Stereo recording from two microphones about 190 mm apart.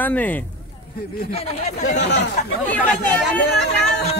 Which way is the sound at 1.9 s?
60° left (ahead or behind).